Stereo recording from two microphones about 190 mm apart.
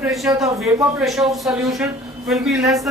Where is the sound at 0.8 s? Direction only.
Centre (ahead or behind).